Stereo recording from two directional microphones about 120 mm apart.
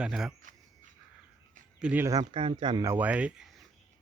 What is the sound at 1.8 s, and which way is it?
Speech, 10° right (ahead or behind).